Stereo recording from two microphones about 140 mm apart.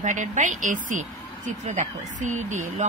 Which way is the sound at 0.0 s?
60° right (ahead or behind).